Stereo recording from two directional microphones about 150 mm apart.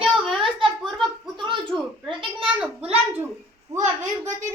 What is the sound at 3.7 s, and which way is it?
Speech, 55° right (ahead or behind).